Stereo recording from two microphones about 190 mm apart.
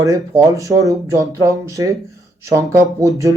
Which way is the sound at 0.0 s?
15° right (ahead or behind).